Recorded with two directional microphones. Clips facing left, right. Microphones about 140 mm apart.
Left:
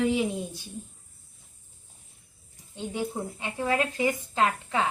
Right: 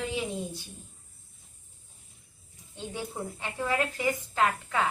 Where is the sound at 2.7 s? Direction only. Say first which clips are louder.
Left 5 dB; 15° left (ahead or behind).